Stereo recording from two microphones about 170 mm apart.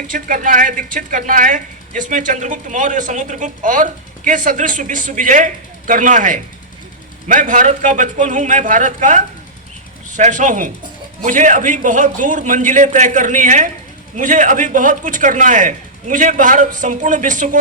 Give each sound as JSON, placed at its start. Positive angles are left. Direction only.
{"t": 0.1, "sound": "speech", "side_deg": -50}